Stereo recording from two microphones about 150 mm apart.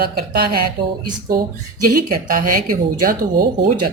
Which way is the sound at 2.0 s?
80° right.